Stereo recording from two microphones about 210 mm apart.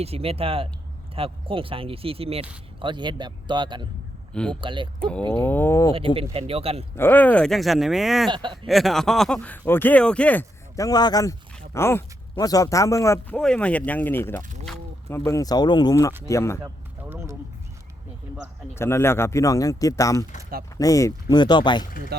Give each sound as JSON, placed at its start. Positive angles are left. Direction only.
{"t": 0.0, "sound": "speech", "side_deg": -30}
{"t": 4.9, "sound": "speech", "side_deg": 5}
{"t": 6.3, "sound": "speech", "side_deg": -25}
{"t": 6.9, "sound": "speech", "side_deg": 10}
{"t": 8.3, "sound": "speech", "side_deg": -20}
{"t": 8.6, "sound": "speech", "side_deg": 0}
{"t": 16.6, "sound": "a sound", "side_deg": -10}
{"t": 18.7, "sound": "speech", "side_deg": 10}